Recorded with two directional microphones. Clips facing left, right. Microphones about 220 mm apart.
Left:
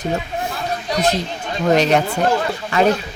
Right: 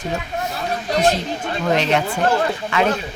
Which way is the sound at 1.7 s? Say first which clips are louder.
Left 4 dB; 40° left (ahead or behind).